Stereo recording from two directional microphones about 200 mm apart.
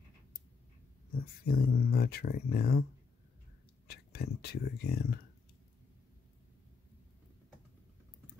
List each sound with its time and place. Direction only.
1.4 s speech: 50° left (ahead or behind)
3.8 s speech: 55° left (ahead or behind)